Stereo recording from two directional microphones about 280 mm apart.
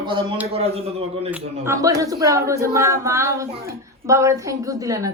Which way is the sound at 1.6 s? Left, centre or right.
Centre.